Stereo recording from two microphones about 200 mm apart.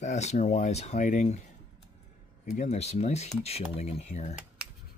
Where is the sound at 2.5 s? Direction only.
35° left (ahead or behind).